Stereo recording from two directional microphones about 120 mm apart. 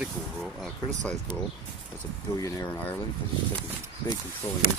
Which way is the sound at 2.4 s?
25° left (ahead or behind).